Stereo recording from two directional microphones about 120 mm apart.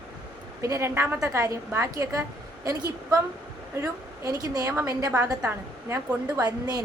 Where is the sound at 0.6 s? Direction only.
25° right (ahead or behind).